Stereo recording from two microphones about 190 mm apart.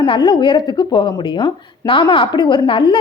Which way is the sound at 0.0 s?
25° left (ahead or behind).